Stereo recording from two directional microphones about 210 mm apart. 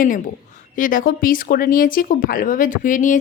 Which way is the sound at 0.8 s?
40° left (ahead or behind).